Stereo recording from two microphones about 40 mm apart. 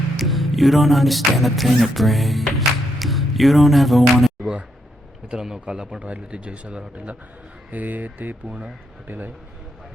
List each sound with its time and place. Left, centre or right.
0.2 s beatboxing: centre
5.3 s a man's voice: centre
6.0 s speech: right